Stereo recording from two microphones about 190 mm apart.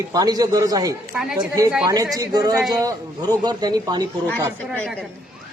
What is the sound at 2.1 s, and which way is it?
A man's voice, 20° right (ahead or behind).